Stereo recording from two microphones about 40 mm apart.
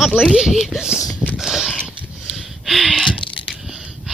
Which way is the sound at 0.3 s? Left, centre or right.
Centre.